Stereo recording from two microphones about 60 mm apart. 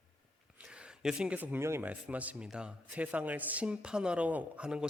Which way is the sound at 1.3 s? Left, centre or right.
Right.